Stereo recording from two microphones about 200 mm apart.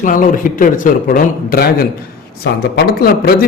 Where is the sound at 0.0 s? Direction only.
40° left (ahead or behind).